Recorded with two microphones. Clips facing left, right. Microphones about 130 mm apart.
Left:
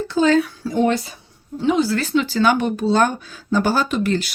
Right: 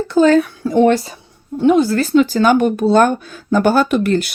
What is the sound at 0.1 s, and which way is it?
Speech, 50° right (ahead or behind).